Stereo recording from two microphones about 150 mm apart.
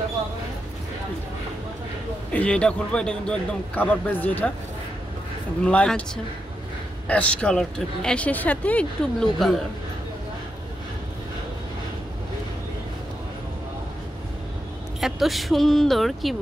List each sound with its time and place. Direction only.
2.3 s speech: 5° left (ahead or behind)
5.7 s speech: 10° left (ahead or behind)
7.1 s speech: 10° left (ahead or behind)
15.0 s speech: centre (ahead or behind)